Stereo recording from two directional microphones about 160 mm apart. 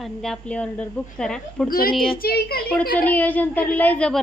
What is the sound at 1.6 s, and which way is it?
A woman's voice, 65° left (ahead or behind).